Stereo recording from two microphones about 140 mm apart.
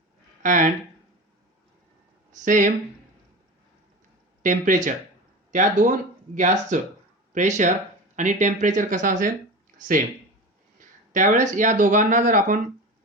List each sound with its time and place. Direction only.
0.4 s speech: 65° right (ahead or behind)
2.3 s speech: 70° right (ahead or behind)
4.4 s speech: 70° right (ahead or behind)
11.1 s speech: 70° right (ahead or behind)